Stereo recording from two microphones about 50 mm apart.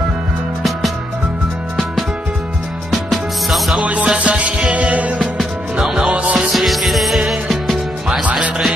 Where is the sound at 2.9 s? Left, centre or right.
Centre.